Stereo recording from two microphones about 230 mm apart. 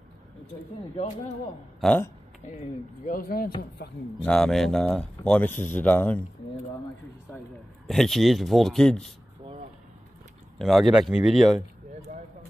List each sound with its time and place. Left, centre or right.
1.8 s speech: centre
2.4 s speech: left
4.2 s speech: centre
7.8 s speech: centre
10.6 s speech: centre
12.1 s a sound: right